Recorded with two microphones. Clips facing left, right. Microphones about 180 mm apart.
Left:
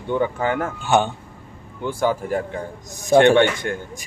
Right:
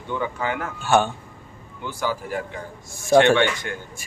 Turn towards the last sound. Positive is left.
turn(degrees=50)  # may be behind; listen again after turning